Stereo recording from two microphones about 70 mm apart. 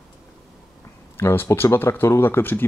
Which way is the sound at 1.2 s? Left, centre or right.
Left.